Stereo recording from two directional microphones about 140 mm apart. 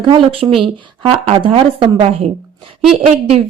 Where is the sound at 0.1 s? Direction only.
45° right (ahead or behind).